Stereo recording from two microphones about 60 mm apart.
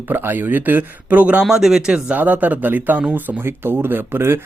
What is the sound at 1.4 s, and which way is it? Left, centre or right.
Speech, centre.